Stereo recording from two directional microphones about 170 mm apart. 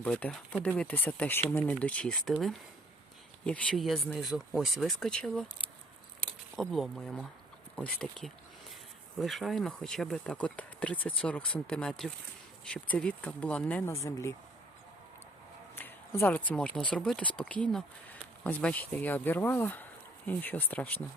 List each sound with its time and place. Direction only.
0.0 s speech: 10° left (ahead or behind)
15.7 s speech: 15° left (ahead or behind)